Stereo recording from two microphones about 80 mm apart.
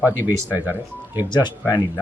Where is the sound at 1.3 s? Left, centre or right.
Left.